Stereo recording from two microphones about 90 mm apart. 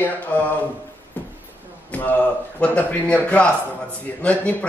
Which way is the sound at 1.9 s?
15° left (ahead or behind).